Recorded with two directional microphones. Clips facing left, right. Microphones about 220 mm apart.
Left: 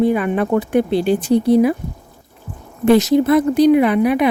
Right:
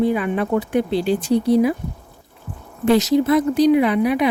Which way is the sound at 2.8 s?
55° left (ahead or behind).